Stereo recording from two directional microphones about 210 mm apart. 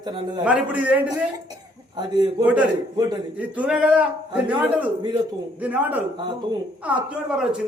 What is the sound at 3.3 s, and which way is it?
A man's voice, 5° right (ahead or behind).